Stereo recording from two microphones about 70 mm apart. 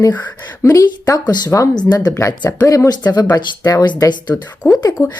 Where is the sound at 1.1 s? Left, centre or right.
Left.